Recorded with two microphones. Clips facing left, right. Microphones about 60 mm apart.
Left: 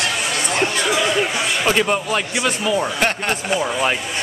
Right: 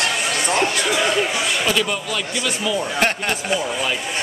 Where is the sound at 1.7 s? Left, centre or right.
Left.